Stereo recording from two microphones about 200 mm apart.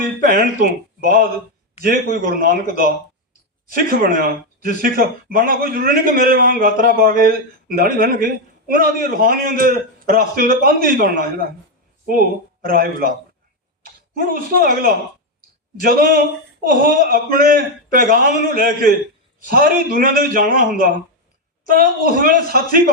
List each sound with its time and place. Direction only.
0.3 s a man's voice: 45° right (ahead or behind)
12.6 s a man's voice: 45° right (ahead or behind)